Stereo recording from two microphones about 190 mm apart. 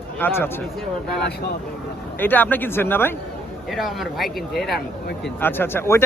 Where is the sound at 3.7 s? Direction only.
Centre (ahead or behind).